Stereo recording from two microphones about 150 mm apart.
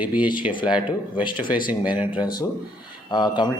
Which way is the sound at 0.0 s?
10° right (ahead or behind).